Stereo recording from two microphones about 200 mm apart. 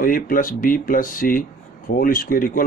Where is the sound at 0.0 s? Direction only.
45° left (ahead or behind).